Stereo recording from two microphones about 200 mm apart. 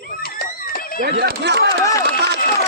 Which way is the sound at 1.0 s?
50° right (ahead or behind).